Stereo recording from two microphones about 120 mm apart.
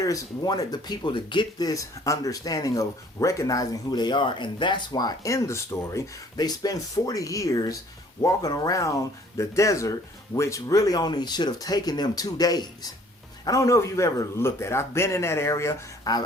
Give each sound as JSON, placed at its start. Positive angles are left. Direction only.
{"t": 0.0, "sound": "speech", "side_deg": 30}